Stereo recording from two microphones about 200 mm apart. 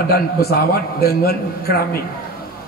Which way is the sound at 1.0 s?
50° left (ahead or behind).